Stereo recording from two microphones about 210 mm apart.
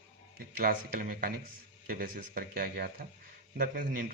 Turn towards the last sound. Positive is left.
turn(degrees=-40)  # may be behind; listen again after turning